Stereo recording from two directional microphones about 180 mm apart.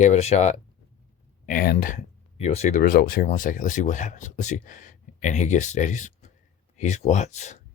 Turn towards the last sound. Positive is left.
turn(degrees=40)  # may be behind; listen again after turning